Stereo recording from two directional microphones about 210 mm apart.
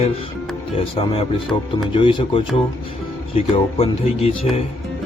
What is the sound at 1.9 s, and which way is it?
Music, 25° left (ahead or behind).